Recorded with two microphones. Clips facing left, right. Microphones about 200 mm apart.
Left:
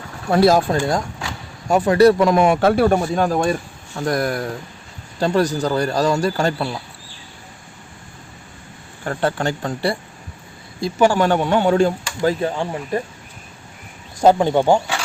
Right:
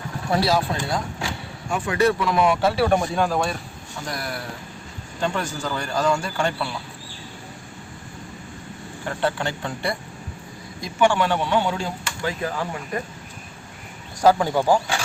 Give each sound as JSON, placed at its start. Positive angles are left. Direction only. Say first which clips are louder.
{"t": 0.3, "sound": "speech", "louder": "left 7 dB", "side_deg": 50}
{"t": 9.0, "sound": "speech", "louder": "left 4 dB", "side_deg": 45}
{"t": 12.0, "sound": "speech", "louder": "left 7 dB", "side_deg": 35}
{"t": 14.2, "sound": "speech", "louder": "left 4 dB", "side_deg": 25}